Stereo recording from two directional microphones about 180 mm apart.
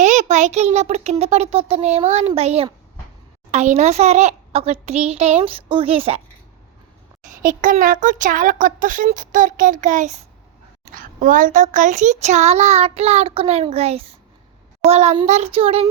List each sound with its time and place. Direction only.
0.0 s a sound: 40° right (ahead or behind)
1.2 s a child's voice: 35° right (ahead or behind)
7.4 s a child's voice: 50° right (ahead or behind); by 15.9 s 35° right (ahead or behind)